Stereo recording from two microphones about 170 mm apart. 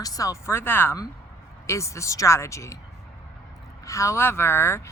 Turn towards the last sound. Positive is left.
turn(degrees=15)  # may be behind; listen again after turning